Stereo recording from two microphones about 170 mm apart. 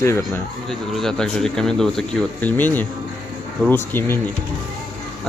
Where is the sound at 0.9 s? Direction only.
Centre (ahead or behind).